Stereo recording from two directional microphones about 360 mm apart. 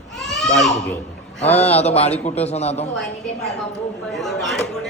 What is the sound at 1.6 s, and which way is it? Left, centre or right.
A man's voice, centre.